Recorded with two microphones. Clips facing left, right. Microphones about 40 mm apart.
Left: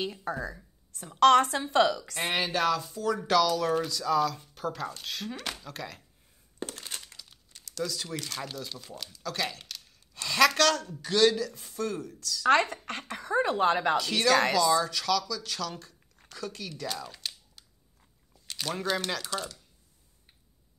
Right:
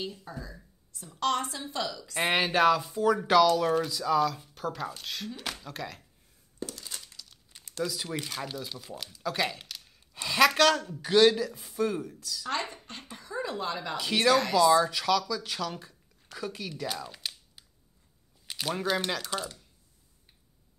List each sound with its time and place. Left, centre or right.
0.0 s a woman's voice: left
2.1 s speech: centre
6.6 s a sound: left
7.8 s speech: centre
12.4 s a woman's voice: left
13.9 s speech: centre
14.3 s a woman's voice: left
14.6 s speech: centre
16.3 s a sound: centre
18.5 s speech: centre
19.3 s speech: centre